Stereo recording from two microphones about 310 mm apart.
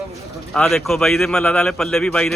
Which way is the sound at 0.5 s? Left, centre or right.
Centre.